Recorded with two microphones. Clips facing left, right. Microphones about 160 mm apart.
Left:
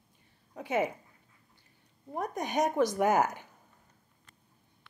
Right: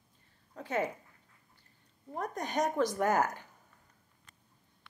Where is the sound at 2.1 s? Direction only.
15° left (ahead or behind).